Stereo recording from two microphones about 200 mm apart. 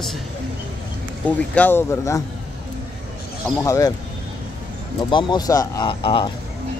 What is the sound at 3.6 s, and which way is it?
Speech, 15° left (ahead or behind).